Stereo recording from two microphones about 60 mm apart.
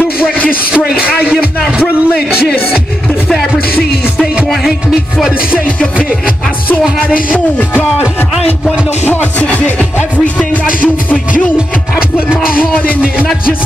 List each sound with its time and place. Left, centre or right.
0.7 s a man's voice: centre
5.9 s music: centre
6.8 s a man's voice: centre
7.3 s music: left
9.1 s music: left
11.5 s a man's voice: centre
12.5 s music: left